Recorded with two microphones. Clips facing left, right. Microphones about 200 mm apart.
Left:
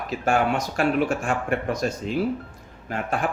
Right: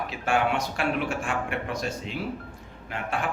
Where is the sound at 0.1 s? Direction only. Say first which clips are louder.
Left 4 dB; 40° left (ahead or behind).